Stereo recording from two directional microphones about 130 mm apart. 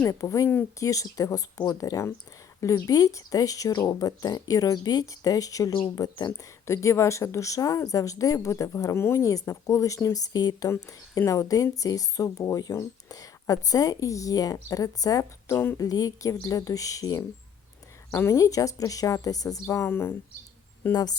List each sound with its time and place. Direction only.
0.1 s a woman's voice: 25° left (ahead or behind)
20.9 s speech: 30° left (ahead or behind)